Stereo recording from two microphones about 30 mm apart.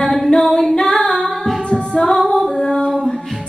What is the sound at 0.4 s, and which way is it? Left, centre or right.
A capella, centre.